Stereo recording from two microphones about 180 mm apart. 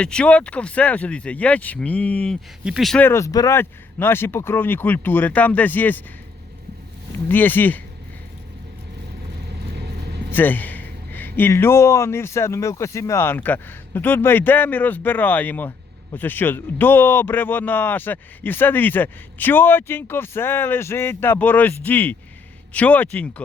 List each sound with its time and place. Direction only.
0.0 s speech: 5° left (ahead or behind)
7.3 s speech: 10° left (ahead or behind)
9.7 s vehicle: 65° right (ahead or behind)
10.3 s a sound: 10° left (ahead or behind)
11.3 s speech: 10° left (ahead or behind)